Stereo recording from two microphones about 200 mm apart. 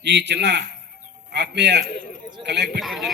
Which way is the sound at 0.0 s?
60° right (ahead or behind).